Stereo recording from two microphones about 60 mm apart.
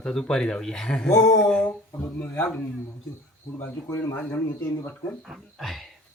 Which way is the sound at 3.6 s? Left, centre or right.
Left.